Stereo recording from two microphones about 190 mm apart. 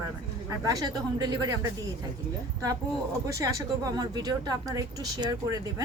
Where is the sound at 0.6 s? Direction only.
20° right (ahead or behind).